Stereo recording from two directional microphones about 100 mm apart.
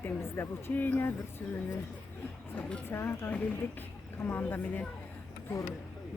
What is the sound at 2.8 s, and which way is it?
Speech, 25° left (ahead or behind).